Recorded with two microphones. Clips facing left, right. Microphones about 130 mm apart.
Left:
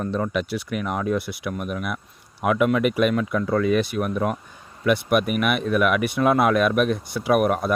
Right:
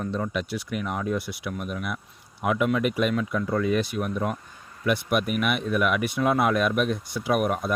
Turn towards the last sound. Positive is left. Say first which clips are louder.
# left 4 dB
turn(degrees=60)  # may be behind; listen again after turning